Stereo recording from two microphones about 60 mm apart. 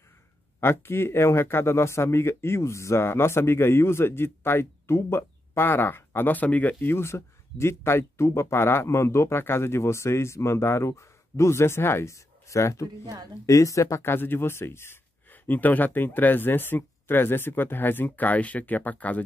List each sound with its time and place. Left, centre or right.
0.6 s speech: left
14.0 s speech: left
15.3 s speech: left